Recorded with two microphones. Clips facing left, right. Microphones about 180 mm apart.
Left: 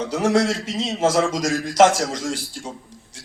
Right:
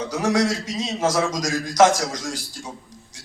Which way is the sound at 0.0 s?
25° left (ahead or behind).